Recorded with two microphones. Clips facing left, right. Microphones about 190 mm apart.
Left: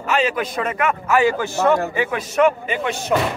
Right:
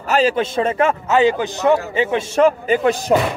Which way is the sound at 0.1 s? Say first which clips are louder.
Right 4 dB; 30° right (ahead or behind).